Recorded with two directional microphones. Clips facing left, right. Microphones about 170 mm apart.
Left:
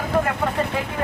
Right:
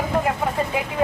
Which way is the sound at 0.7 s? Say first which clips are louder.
Right 1 dB; 15° right (ahead or behind).